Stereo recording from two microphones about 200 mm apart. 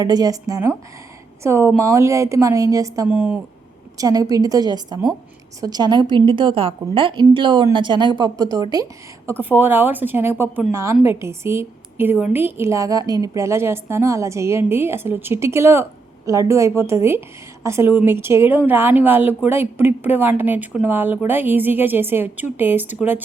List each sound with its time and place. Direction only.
0.0 s a woman's voice: 20° right (ahead or behind)